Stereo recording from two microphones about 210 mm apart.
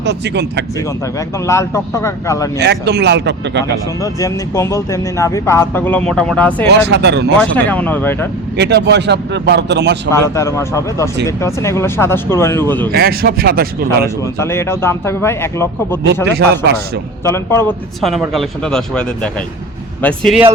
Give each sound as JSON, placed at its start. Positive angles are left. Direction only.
{"t": 0.0, "sound": "speech", "side_deg": -55}
{"t": 1.5, "sound": "speech", "side_deg": 15}
{"t": 2.6, "sound": "speech", "side_deg": -55}
{"t": 4.0, "sound": "speech", "side_deg": 15}
{"t": 6.7, "sound": "speech", "side_deg": -55}
{"t": 7.5, "sound": "speech", "side_deg": 5}
{"t": 8.5, "sound": "speech", "side_deg": -55}
{"t": 10.1, "sound": "speech", "side_deg": 15}
{"t": 12.9, "sound": "speech", "side_deg": -45}
{"t": 14.3, "sound": "speech", "side_deg": 10}
{"t": 16.4, "sound": "speech", "side_deg": -50}
{"t": 17.2, "sound": "speech", "side_deg": 10}
{"t": 18.0, "sound": "speech", "side_deg": 0}